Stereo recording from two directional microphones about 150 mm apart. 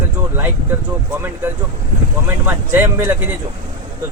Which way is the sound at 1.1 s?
15° right (ahead or behind).